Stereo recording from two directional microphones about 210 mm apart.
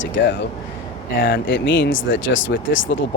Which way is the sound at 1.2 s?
45° left (ahead or behind).